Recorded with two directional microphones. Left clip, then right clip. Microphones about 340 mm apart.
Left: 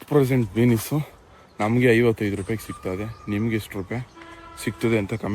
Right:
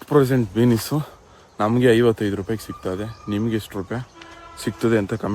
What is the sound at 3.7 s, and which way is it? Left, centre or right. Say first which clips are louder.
Speech: right 2 dB; right.